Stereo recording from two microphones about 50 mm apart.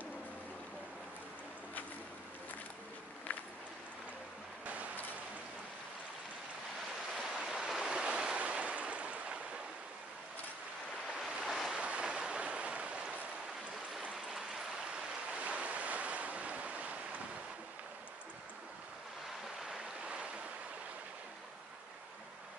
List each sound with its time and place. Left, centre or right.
3.3 s a sound: left
7.4 s waves: centre
8.4 s stream: right
11.4 s waves: centre
11.8 s waves: right
14.1 s a sound: centre
15.3 s waves: right
19.4 s stream: centre